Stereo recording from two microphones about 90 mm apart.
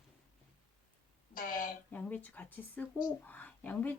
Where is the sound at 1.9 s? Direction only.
20° left (ahead or behind).